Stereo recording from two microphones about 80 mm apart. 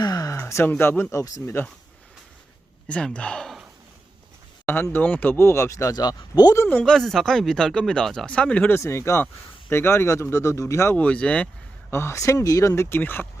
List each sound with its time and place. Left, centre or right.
0.0 s a sound: left
0.3 s a sound: left
0.7 s speech: left
2.8 s speech: centre
4.6 s speech: left
5.4 s speech: left
5.9 s speech: left
6.8 s speech: centre
8.3 s speech: centre
8.7 s speech: left
10.9 s speech: centre
11.9 s speech: left